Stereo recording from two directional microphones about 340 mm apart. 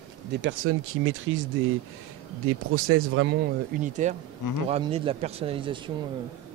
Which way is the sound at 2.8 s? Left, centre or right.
Right.